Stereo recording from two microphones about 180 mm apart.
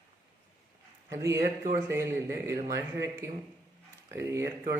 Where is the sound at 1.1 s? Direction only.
15° right (ahead or behind).